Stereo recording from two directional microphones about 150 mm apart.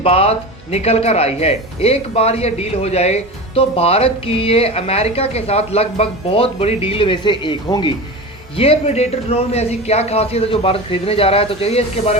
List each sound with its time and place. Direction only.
0.0 s a man's voice: 40° left (ahead or behind)